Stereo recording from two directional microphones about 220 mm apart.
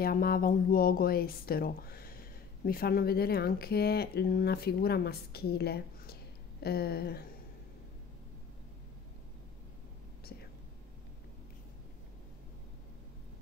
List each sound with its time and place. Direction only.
0.0 s speech: 40° left (ahead or behind)